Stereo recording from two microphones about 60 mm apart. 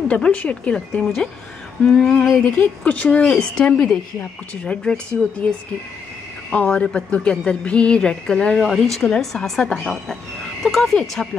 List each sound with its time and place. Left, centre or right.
0.1 s speech: left
0.7 s a woman's voice: centre
2.8 s a woman's voice: left
6.5 s a woman's voice: left